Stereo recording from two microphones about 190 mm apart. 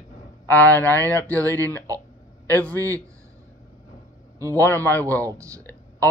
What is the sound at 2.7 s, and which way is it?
Speech, 15° right (ahead or behind).